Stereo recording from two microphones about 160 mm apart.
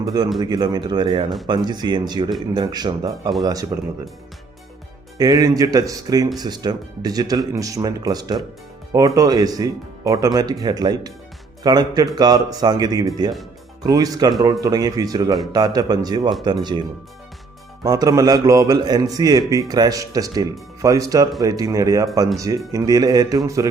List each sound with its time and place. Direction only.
0.0 s a man's voice: 25° right (ahead or behind)
5.1 s a man's voice: 25° right (ahead or behind)
17.8 s a man's voice: 20° right (ahead or behind)